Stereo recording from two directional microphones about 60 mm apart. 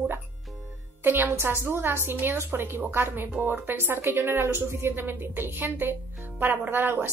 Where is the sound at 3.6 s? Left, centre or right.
Right.